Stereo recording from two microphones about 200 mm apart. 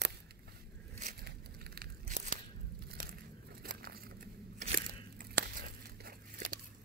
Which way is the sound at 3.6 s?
50° right (ahead or behind).